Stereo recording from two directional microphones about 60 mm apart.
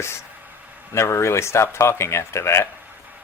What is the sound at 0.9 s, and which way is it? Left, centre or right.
Speech, left.